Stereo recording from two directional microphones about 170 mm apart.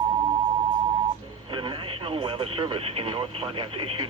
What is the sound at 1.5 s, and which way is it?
Speech, 30° right (ahead or behind).